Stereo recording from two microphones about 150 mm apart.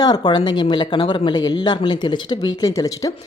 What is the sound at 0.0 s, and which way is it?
Speech, 25° left (ahead or behind).